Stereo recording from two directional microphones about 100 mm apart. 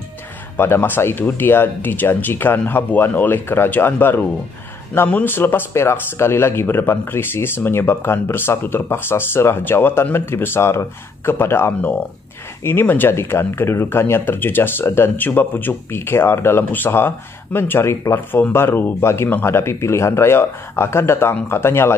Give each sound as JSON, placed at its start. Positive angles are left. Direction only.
{"t": 0.6, "sound": "speech", "side_deg": 20}